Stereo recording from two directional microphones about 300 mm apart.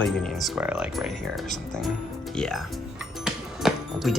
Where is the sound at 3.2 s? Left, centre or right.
Centre.